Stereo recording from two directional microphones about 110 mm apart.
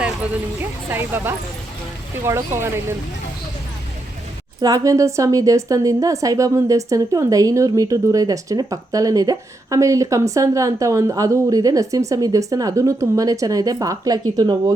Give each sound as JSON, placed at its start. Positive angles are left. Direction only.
{"t": 0.6, "sound": "speech", "side_deg": -20}
{"t": 4.6, "sound": "a woman's voice", "side_deg": -30}